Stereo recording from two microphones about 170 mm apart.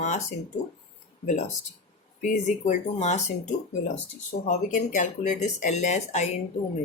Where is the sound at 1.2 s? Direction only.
40° left (ahead or behind).